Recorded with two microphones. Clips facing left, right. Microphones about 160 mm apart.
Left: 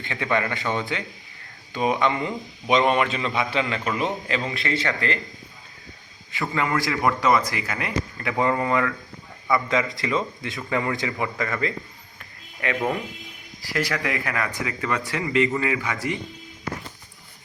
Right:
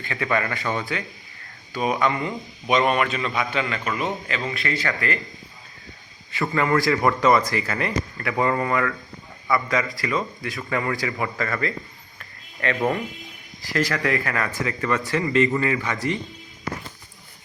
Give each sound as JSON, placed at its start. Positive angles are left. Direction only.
{"t": 0.0, "sound": "a man's voice", "side_deg": 20}
{"t": 6.5, "sound": "speech", "side_deg": 15}
{"t": 6.9, "sound": "speech", "side_deg": 0}
{"t": 7.5, "sound": "a man's voice", "side_deg": 15}
{"t": 15.4, "sound": "speech", "side_deg": 0}
{"t": 15.7, "sound": "speech", "side_deg": 15}